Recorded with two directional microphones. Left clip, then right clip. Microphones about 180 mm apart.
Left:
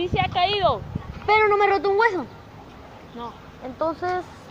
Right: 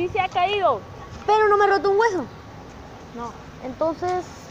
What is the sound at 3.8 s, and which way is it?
Speech, 20° right (ahead or behind).